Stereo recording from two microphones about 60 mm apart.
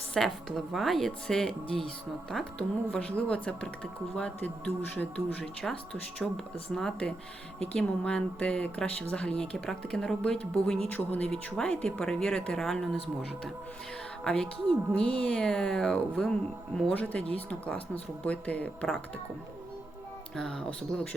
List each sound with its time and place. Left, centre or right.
0.1 s a woman's voice: centre
7.6 s speech: centre
10.8 s speech: left
11.3 s speech: centre
14.3 s speech: centre
16.9 s speech: left
20.3 s speech: centre